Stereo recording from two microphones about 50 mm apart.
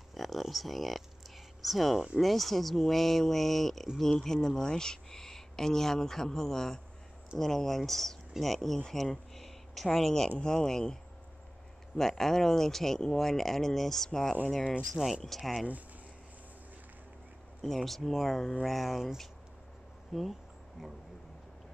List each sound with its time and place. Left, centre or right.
0.1 s speech: centre
12.0 s speech: centre
14.9 s speech: centre
17.6 s speech: centre